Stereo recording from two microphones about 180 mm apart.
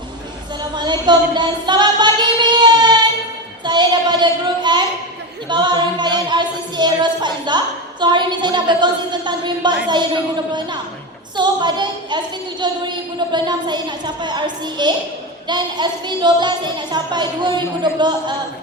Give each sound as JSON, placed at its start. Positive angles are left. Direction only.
{"t": 0.8, "sound": "female singing", "side_deg": -25}
{"t": 3.6, "sound": "child singing", "side_deg": -25}
{"t": 5.5, "sound": "speech", "side_deg": -25}
{"t": 11.3, "sound": "speech", "side_deg": -25}